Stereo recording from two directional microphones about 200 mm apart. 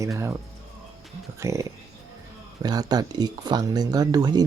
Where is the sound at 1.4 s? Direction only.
15° right (ahead or behind).